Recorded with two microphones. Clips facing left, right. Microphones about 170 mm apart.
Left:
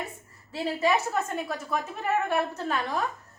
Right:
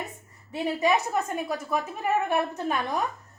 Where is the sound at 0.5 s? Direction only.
15° right (ahead or behind).